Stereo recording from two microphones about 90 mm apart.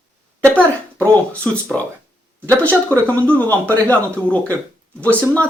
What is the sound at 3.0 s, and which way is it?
Speech, 15° left (ahead or behind).